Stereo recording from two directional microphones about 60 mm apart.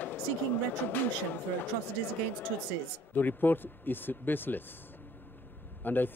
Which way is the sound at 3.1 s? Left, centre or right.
Left.